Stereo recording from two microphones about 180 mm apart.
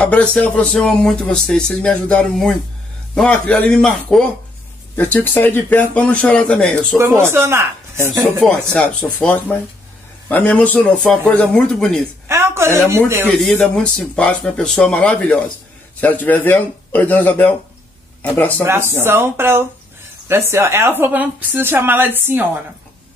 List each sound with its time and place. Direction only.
0.0 s speech: 5° left (ahead or behind)
7.0 s speech: 15° right (ahead or behind)
8.4 s speech: centre (ahead or behind)
12.3 s speech: 15° right (ahead or behind)
13.4 s speech: 5° left (ahead or behind)
18.6 s speech: 15° right (ahead or behind)